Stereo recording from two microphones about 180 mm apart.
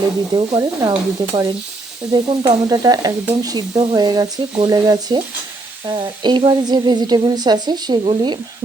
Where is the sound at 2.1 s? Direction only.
20° right (ahead or behind).